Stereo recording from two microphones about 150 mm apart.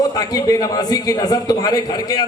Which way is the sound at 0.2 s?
25° left (ahead or behind).